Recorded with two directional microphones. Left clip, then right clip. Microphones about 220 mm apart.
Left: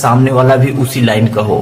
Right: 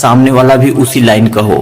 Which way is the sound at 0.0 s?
35° right (ahead or behind).